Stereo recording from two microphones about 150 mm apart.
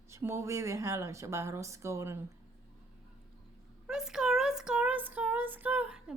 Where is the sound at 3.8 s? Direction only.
5° right (ahead or behind).